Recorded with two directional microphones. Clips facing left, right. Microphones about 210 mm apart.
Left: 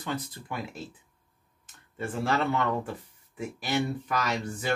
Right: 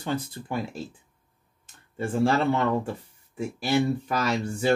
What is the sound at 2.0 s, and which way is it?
Speech, 30° right (ahead or behind).